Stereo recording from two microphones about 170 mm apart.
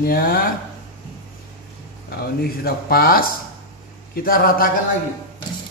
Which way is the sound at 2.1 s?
65° left (ahead or behind).